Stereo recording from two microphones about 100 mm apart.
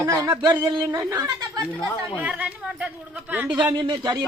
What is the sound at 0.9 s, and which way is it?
Speech, 35° right (ahead or behind).